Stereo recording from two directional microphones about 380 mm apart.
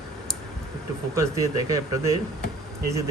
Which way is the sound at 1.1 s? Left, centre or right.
Centre.